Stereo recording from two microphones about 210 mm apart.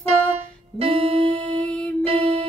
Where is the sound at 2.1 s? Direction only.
25° right (ahead or behind).